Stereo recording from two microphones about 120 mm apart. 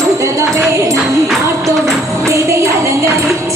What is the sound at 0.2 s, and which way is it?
Tambourine, 25° right (ahead or behind).